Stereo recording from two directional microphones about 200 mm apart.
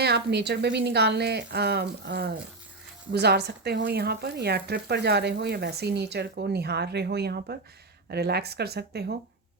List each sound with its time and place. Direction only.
0.0 s speech: 55° right (ahead or behind)